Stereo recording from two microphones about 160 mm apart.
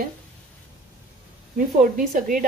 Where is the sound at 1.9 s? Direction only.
55° right (ahead or behind).